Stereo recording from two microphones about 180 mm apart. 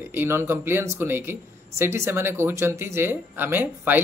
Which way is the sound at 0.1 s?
10° right (ahead or behind).